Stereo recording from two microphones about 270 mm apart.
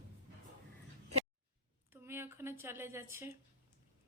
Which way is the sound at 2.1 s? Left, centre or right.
Centre.